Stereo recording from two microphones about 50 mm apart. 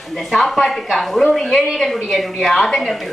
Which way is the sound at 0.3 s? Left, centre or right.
Centre.